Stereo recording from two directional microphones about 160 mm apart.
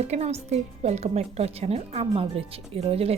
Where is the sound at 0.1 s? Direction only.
40° right (ahead or behind).